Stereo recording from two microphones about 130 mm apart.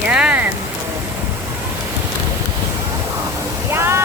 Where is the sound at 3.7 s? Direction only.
20° right (ahead or behind).